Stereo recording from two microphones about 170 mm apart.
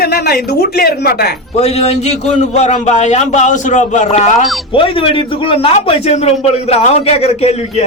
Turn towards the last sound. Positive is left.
turn(degrees=40)  # may be behind; listen again after turning